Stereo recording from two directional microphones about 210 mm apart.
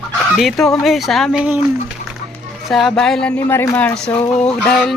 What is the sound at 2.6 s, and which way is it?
Speech, centre (ahead or behind).